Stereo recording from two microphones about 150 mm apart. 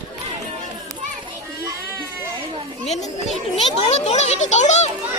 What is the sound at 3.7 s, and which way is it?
A child's voice, 45° left (ahead or behind).